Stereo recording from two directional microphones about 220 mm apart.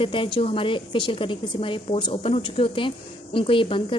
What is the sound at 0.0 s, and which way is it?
A woman's voice, 25° left (ahead or behind).